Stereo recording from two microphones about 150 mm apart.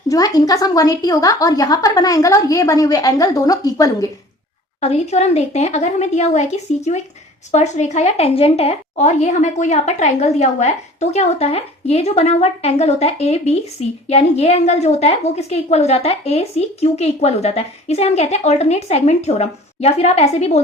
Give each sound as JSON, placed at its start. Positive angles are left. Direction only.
{"t": 0.1, "sound": "a woman's voice", "side_deg": 25}
{"t": 4.8, "sound": "a woman's voice", "side_deg": 45}